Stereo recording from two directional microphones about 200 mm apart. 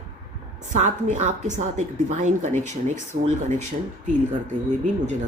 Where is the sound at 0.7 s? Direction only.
35° right (ahead or behind).